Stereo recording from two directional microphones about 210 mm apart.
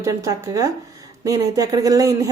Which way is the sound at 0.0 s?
15° right (ahead or behind).